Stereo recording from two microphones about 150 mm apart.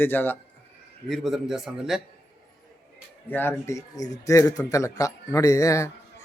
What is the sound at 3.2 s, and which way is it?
Speech, 15° left (ahead or behind).